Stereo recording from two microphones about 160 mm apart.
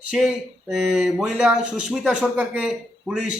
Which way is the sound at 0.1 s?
5° right (ahead or behind).